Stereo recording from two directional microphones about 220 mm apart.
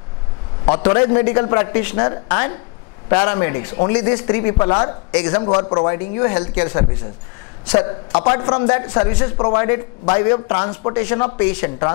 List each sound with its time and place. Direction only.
0.7 s a man's voice: 25° left (ahead or behind)